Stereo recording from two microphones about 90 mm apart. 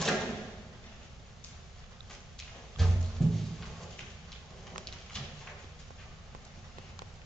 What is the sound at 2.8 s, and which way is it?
Music, centre (ahead or behind).